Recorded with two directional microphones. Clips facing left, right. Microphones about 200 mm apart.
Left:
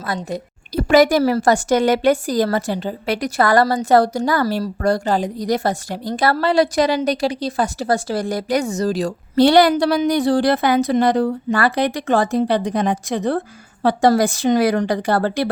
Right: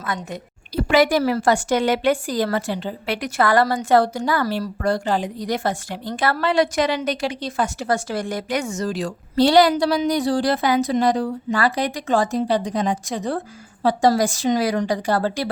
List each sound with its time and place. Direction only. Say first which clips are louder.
0.0 s a woman's voice: left 4 dB; 35° left (ahead or behind)
9.3 s a woman's voice: left 2 dB; 55° left (ahead or behind)